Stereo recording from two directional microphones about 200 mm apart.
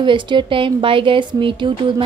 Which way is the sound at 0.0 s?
25° right (ahead or behind).